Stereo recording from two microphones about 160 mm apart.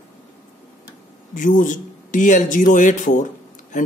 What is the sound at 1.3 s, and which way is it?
Speech, 55° left (ahead or behind).